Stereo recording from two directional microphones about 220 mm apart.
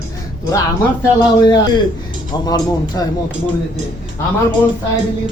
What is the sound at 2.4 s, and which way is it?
Speech, 15° left (ahead or behind).